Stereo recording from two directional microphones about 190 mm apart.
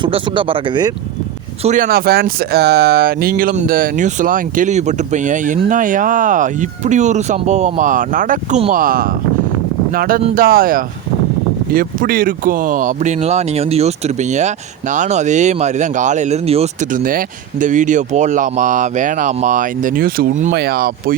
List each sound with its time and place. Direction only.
0.0 s speech: 25° right (ahead or behind)
1.6 s speech: 45° right (ahead or behind)